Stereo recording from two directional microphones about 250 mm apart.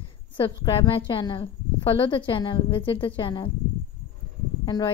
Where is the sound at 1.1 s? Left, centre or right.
Centre.